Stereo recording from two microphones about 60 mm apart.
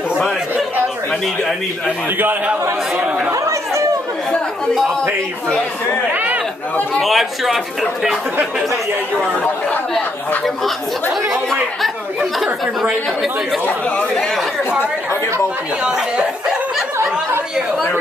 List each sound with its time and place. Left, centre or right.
1.9 s a man's voice: right
3.3 s chatter: right
6.1 s chatter: right
7.0 s speech: centre
10.4 s speech: centre
13.7 s speech: left
15.8 s a sound: centre